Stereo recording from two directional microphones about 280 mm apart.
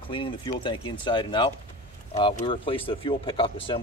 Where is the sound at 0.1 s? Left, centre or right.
Centre.